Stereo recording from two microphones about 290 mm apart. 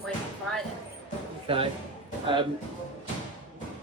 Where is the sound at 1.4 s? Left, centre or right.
Centre.